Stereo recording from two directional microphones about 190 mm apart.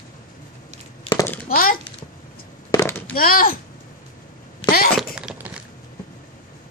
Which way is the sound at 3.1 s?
50° left (ahead or behind).